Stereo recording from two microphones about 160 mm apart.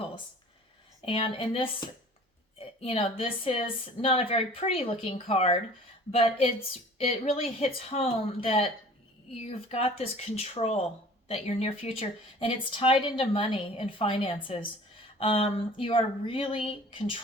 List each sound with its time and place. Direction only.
1.0 s speech: 35° left (ahead or behind)
2.8 s speech: 40° left (ahead or behind)